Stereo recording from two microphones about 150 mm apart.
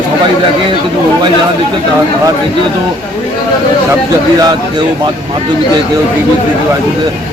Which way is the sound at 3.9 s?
25° right (ahead or behind).